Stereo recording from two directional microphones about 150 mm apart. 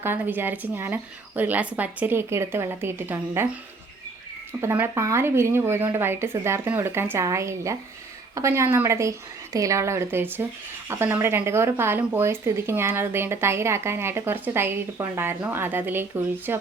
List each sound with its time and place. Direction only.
0.0 s speech: 15° right (ahead or behind)
4.6 s a woman's voice: 15° right (ahead or behind)